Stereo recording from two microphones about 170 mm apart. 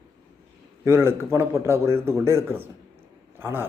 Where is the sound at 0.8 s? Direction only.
15° right (ahead or behind).